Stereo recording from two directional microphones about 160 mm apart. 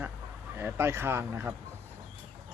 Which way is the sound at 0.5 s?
15° right (ahead or behind).